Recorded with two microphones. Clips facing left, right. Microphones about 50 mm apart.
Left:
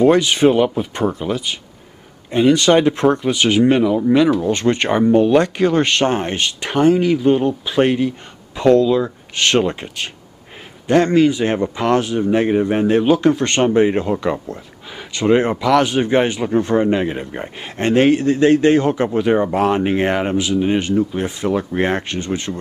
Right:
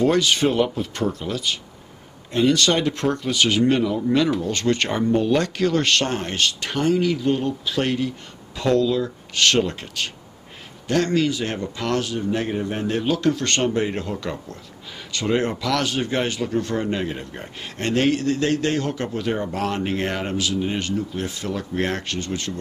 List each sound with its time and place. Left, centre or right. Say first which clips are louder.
0.0 s speech: left 6 dB; centre
12.3 s speech: left 8 dB; left